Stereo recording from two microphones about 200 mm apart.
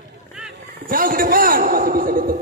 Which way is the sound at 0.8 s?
45° right (ahead or behind).